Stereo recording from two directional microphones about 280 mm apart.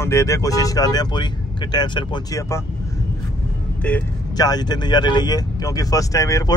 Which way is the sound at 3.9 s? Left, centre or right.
Centre.